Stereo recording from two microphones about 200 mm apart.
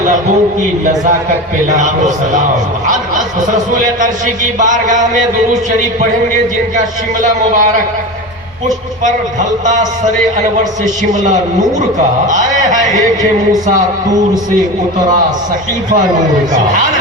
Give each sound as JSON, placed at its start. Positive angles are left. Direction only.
{"t": 1.7, "sound": "a man's voice", "side_deg": -40}
{"t": 3.4, "sound": "a man's voice", "side_deg": -40}
{"t": 6.7, "sound": "a man's voice", "side_deg": -40}
{"t": 10.6, "sound": "a man's voice", "side_deg": -40}